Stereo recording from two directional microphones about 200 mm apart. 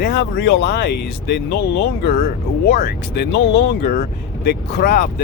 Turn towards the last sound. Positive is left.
turn(degrees=45)  # may be behind; listen again after turning